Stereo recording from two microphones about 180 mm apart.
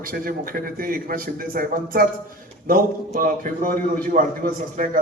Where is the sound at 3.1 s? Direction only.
50° right (ahead or behind).